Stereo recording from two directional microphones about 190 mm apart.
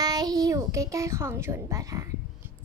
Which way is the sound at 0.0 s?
20° right (ahead or behind).